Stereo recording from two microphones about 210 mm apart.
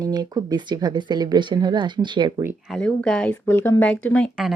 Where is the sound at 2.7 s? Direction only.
5° left (ahead or behind).